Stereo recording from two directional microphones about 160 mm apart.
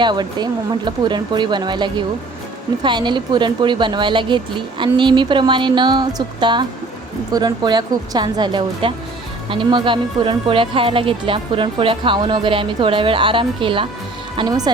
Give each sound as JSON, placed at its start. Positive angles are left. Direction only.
{"t": 0.0, "sound": "speech", "side_deg": -25}